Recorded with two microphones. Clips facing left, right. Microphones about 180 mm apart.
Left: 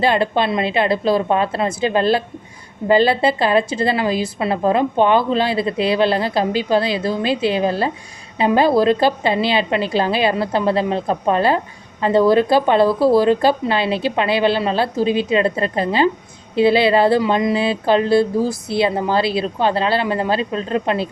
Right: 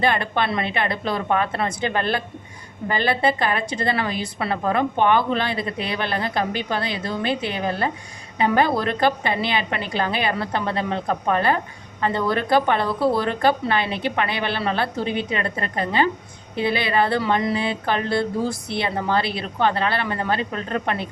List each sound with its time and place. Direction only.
0.0 s a woman's voice: 25° left (ahead or behind)